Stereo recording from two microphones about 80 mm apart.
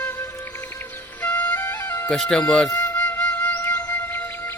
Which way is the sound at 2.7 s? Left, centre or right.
Left.